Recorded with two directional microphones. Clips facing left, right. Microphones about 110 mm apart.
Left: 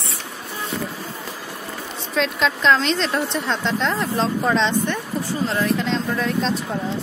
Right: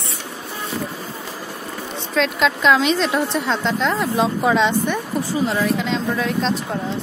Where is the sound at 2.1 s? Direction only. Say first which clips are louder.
Right 2 dB; centre (ahead or behind).